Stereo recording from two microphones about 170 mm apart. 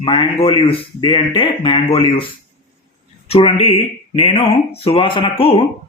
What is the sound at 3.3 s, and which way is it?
Speech, 35° left (ahead or behind).